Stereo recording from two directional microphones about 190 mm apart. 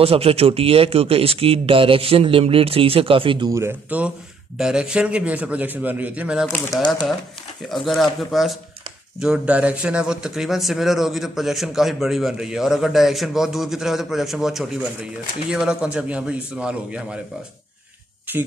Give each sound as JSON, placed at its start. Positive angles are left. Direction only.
{"t": 0.0, "sound": "a man's voice", "side_deg": -30}
{"t": 6.5, "sound": "speech", "side_deg": 20}
{"t": 7.7, "sound": "a man's voice", "side_deg": 0}